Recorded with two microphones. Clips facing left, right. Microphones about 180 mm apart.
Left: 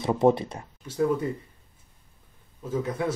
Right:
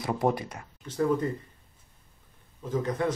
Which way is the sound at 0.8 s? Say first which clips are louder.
Left 1 dB; 10° left (ahead or behind).